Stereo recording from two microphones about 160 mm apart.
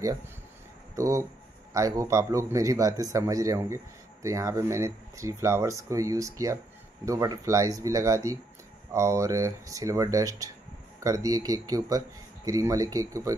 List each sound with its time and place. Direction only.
0.9 s speech: 20° right (ahead or behind)